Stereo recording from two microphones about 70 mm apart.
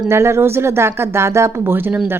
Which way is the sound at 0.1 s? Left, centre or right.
Right.